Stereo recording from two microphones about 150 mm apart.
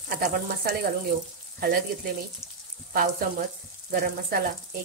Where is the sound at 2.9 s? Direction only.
65° right (ahead or behind).